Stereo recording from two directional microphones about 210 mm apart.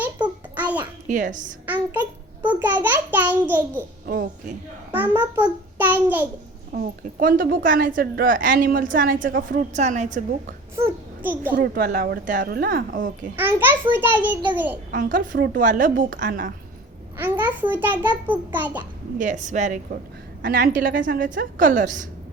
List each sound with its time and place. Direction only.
0.5 s a sound: 10° right (ahead or behind)
1.0 s a woman's voice: 35° right (ahead or behind)
1.6 s a sound: 10° right (ahead or behind)
4.0 s speech: 40° right (ahead or behind)
4.9 s a child's voice: 10° right (ahead or behind)
6.7 s a woman's voice: 40° right (ahead or behind)
10.8 s a child's voice: 10° right (ahead or behind)
11.5 s a woman's voice: 40° right (ahead or behind)
13.3 s a child's voice: 10° right (ahead or behind)
14.8 s a woman's voice: 40° right (ahead or behind)
17.2 s a child's voice: 10° right (ahead or behind)
19.2 s a woman's voice: 35° right (ahead or behind)